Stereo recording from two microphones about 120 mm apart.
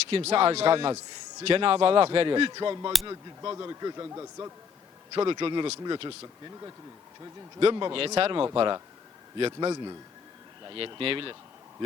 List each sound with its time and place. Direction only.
0.1 s a man's voice: 55° right (ahead or behind); by 4.5 s 25° right (ahead or behind)
5.1 s a man's voice: 45° right (ahead or behind)
7.6 s a man's voice: 45° right (ahead or behind)
8.5 s a man's voice: 40° right (ahead or behind)